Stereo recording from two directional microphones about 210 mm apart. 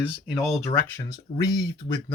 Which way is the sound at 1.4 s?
15° left (ahead or behind).